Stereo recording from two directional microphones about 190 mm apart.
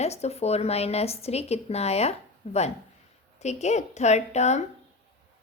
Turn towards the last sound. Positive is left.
turn(degrees=35)  # may be behind; listen again after turning